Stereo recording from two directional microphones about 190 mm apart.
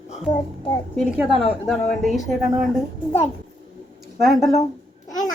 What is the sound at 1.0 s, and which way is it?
A woman's voice, 5° right (ahead or behind).